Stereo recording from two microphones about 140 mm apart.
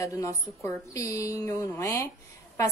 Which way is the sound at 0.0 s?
25° left (ahead or behind).